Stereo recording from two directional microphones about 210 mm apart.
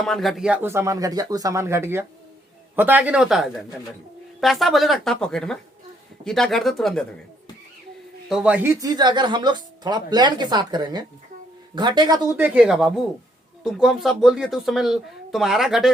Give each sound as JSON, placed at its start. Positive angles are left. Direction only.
{"t": 0.0, "sound": "speech", "side_deg": 0}
{"t": 8.3, "sound": "speech", "side_deg": -5}
{"t": 12.5, "sound": "speech", "side_deg": 0}